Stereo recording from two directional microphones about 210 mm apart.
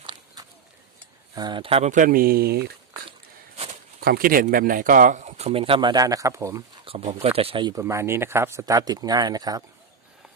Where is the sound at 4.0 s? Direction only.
45° right (ahead or behind); by 6.6 s 15° right (ahead or behind).